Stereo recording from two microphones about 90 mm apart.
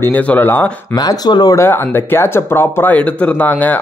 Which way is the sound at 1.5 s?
25° left (ahead or behind).